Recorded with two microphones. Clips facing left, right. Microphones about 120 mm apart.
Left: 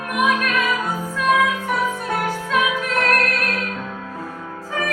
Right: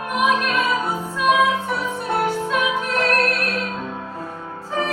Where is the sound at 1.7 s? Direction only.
20° right (ahead or behind).